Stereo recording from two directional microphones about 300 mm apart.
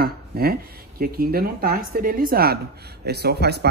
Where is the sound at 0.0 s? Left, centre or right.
Right.